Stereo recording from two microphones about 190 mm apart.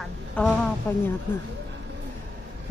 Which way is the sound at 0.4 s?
5° left (ahead or behind).